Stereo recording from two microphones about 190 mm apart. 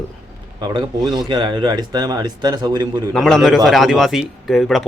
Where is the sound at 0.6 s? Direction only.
25° right (ahead or behind).